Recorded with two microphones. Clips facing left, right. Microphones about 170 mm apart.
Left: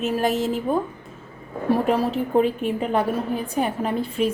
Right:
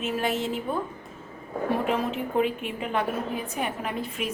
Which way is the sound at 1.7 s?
35° left (ahead or behind).